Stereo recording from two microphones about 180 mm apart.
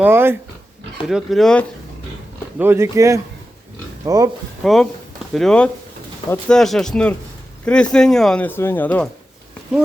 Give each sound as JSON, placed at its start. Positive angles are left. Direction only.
{"t": 0.0, "sound": "speech", "side_deg": -10}
{"t": 1.0, "sound": "speech", "side_deg": 0}
{"t": 2.6, "sound": "speech", "side_deg": -15}
{"t": 4.6, "sound": "speech", "side_deg": 0}